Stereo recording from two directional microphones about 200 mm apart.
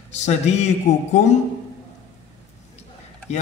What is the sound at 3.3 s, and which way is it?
Speech, 35° left (ahead or behind).